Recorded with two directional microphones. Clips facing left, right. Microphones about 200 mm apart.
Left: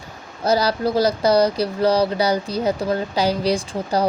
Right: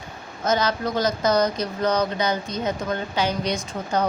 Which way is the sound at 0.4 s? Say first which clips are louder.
Left 4 dB; 35° left (ahead or behind).